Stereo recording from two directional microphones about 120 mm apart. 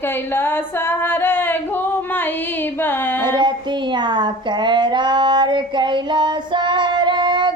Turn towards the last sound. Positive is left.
turn(degrees=-40)  # may be behind; listen again after turning